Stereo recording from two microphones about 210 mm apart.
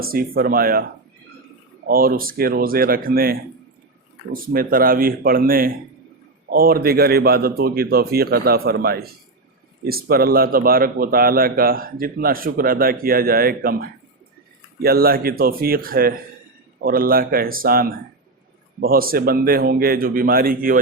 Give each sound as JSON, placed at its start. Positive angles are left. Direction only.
{"t": 0.0, "sound": "speech", "side_deg": -45}
{"t": 1.9, "sound": "speech", "side_deg": -45}